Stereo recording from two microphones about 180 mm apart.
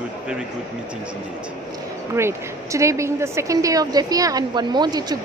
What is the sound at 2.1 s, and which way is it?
A woman's voice, 15° right (ahead or behind).